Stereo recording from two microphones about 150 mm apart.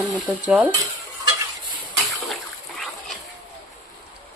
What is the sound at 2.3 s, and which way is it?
Boat, centre (ahead or behind).